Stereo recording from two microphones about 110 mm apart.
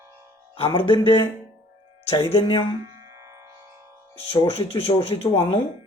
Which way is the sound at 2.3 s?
60° left (ahead or behind).